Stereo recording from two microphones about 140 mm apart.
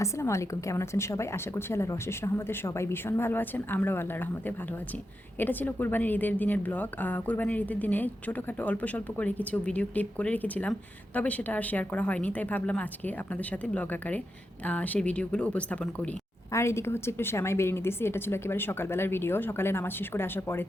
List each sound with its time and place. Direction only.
0.0 s a woman's voice: 20° left (ahead or behind)
5.4 s a woman's voice: 15° left (ahead or behind)
16.5 s a woman's voice: 20° left (ahead or behind)